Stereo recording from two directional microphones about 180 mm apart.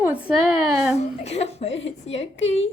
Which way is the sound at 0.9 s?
35° left (ahead or behind).